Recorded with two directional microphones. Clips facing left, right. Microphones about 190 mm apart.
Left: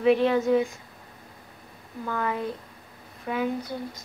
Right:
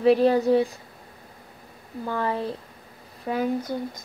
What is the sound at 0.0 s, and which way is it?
Speech, 35° right (ahead or behind).